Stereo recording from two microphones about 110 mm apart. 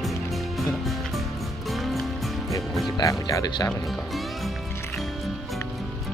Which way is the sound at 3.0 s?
30° left (ahead or behind).